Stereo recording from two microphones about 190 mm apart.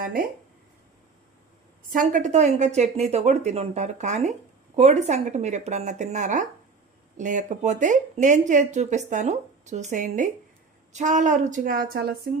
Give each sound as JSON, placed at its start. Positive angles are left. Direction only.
{"t": 1.9, "sound": "speech", "side_deg": -45}